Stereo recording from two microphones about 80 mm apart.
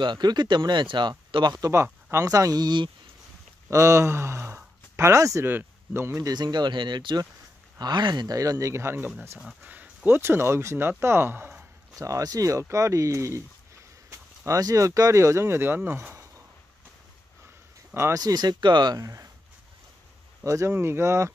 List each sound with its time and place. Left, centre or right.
0.0 s speech: right
1.7 s speech: right
2.2 s speech: right
3.7 s speech: right
5.4 s speech: right
6.2 s speech: right
9.6 s speech: right
11.9 s speech: right
17.9 s speech: right
18.2 s speech: right
18.9 s speech: right
20.4 s speech: right